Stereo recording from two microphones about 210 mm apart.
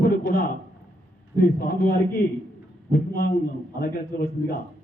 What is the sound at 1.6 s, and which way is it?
Speech, 45° left (ahead or behind).